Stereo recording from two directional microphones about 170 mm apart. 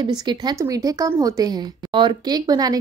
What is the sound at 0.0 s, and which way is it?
Speech, 25° right (ahead or behind).